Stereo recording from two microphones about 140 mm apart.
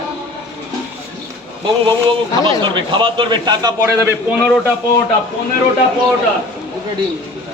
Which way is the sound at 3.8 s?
15° right (ahead or behind).